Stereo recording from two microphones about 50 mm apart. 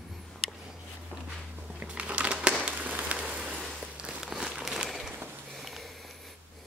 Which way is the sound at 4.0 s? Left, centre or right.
Centre.